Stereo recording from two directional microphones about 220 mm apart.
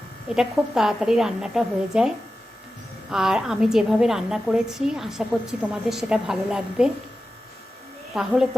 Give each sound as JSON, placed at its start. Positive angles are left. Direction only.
{"t": 0.3, "sound": "a woman's voice", "side_deg": 0}
{"t": 8.1, "sound": "a woman's voice", "side_deg": -5}